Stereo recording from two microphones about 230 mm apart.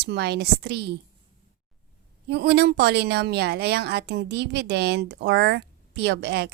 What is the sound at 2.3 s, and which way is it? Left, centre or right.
A woman's voice, right.